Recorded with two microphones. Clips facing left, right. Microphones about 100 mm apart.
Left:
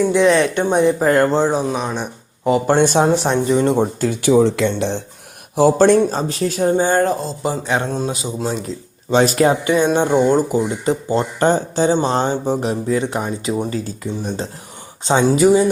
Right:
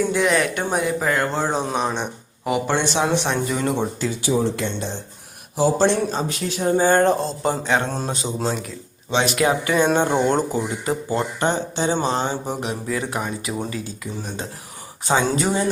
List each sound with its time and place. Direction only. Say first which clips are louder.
0.1 s speech: left 6 dB; 25° left (ahead or behind)
1.0 s speech: left 7 dB; 45° left (ahead or behind)
1.5 s mantra: left 3 dB; 5° left (ahead or behind)
2.6 s speech: left 8 dB; 45° left (ahead or behind)
3.5 s speech: left 10 dB; 25° left (ahead or behind)
3.8 s speech: left 6 dB; 55° left (ahead or behind); by 4.9 s 85° left
5.5 s speech: left 6 dB; 50° left (ahead or behind)
6.1 s speech: left 5 dB; 35° left (ahead or behind)
7.0 s mantra: even; centre (ahead or behind)
9.0 s speech: left 5 dB; 40° left (ahead or behind)
9.6 s speech: left 3 dB; 20° left (ahead or behind)
10.8 s speech: left 5 dB; 30° left (ahead or behind)
13.7 s speech: left 6 dB; 35° left (ahead or behind)
15.4 s speech: left 9 dB; 5° left (ahead or behind)